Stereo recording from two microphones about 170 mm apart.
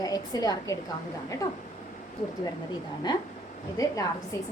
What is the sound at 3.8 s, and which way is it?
Speech, 20° left (ahead or behind).